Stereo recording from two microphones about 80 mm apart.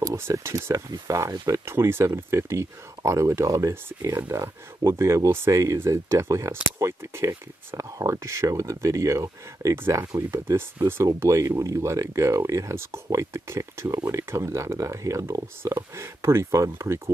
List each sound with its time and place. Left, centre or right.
0.1 s speech: right
1.7 s speech: right